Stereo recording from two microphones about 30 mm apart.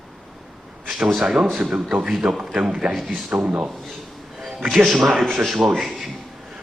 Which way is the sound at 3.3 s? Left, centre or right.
Right.